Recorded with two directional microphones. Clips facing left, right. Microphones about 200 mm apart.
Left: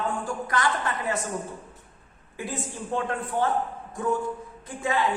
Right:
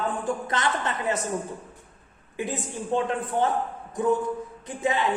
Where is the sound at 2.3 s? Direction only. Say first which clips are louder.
Right 3 dB; 20° right (ahead or behind).